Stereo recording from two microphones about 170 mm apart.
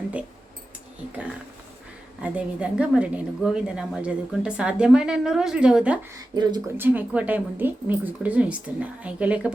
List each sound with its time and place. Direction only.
2.2 s a woman's voice: 5° right (ahead or behind)
6.3 s speech: 25° right (ahead or behind)
6.7 s a woman's voice: 10° right (ahead or behind)